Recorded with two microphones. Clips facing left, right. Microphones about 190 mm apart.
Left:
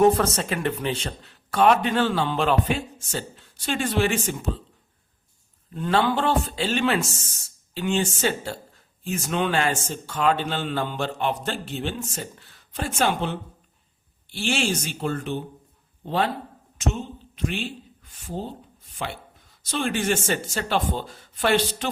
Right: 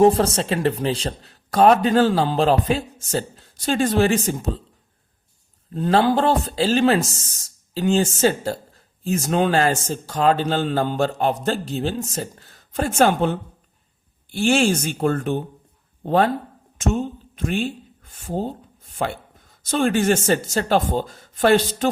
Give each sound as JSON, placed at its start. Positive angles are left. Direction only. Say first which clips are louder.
{"t": 0.0, "sound": "speech", "louder": "right 3 dB", "side_deg": -30}
{"t": 5.7, "sound": "speech", "louder": "right 5 dB", "side_deg": -35}